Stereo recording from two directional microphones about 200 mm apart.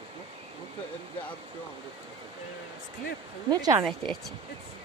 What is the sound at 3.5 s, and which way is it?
Speech, 20° right (ahead or behind).